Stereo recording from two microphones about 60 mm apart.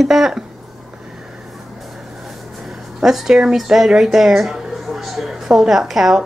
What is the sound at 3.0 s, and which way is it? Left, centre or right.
Speech, centre.